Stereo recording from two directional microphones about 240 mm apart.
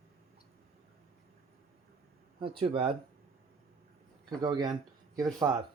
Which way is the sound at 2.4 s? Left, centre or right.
Right.